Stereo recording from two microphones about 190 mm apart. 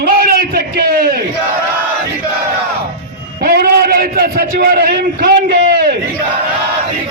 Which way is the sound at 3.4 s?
50° right (ahead or behind).